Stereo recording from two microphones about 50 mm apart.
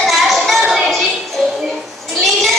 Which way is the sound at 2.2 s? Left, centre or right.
Centre.